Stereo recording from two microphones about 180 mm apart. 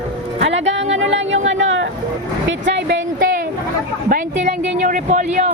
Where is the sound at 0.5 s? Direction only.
90° right.